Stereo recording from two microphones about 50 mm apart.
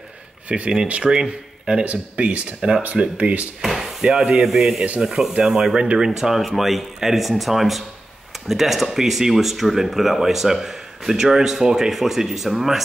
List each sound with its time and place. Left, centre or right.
0.5 s speech: right
3.6 s speech: centre